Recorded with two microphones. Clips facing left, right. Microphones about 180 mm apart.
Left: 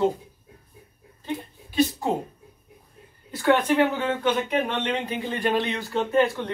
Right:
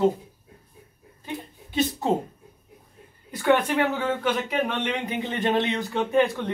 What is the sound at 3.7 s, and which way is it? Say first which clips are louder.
Speech: left 2 dB; 10° right (ahead or behind).